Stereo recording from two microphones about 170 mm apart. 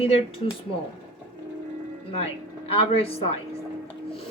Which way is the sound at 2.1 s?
35° left (ahead or behind).